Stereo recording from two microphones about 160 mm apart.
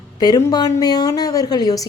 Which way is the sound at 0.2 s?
25° left (ahead or behind).